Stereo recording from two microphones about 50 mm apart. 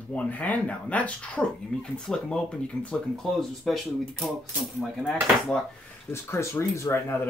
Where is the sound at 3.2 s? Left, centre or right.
Centre.